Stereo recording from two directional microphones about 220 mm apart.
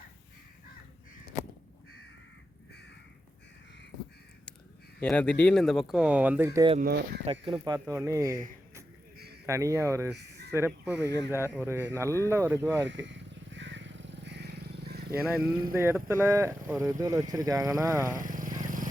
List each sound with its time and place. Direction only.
4.9 s speech: 5° left (ahead or behind); by 6.7 s 15° right (ahead or behind)
6.7 s speech: 45° right (ahead or behind)
7.3 s speech: 20° right (ahead or behind)
9.1 s a sound: 45° right (ahead or behind)
9.5 s speech: 15° right (ahead or behind)
10.1 s a sound: 50° right (ahead or behind)
10.5 s speech: 10° right (ahead or behind)
11.0 s speech: 15° left (ahead or behind)
11.6 s speech: 10° right (ahead or behind)
12.9 s vehicle: 55° right (ahead or behind)
15.3 s speech: 10° right (ahead or behind)
18.1 s vehicle: 35° right (ahead or behind)